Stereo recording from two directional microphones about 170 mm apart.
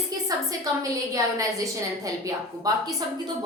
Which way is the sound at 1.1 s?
20° right (ahead or behind).